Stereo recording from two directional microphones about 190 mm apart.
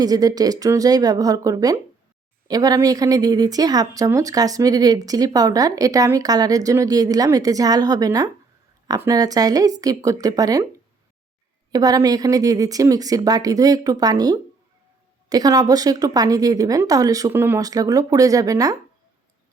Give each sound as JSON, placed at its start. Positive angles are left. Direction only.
{"t": 0.0, "sound": "speech", "side_deg": -20}
{"t": 11.7, "sound": "speech", "side_deg": -20}